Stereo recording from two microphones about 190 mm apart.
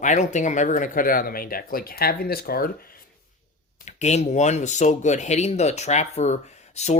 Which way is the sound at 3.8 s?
35° left (ahead or behind).